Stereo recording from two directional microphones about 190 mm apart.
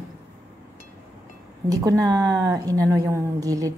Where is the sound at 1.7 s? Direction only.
20° right (ahead or behind).